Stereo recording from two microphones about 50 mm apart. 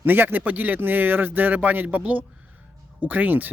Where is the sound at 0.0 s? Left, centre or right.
Right.